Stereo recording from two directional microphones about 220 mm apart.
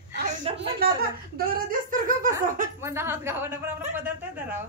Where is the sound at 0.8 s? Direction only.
45° right (ahead or behind).